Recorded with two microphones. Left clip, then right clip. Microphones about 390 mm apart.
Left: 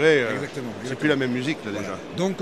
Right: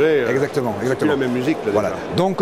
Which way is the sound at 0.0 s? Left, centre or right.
Left.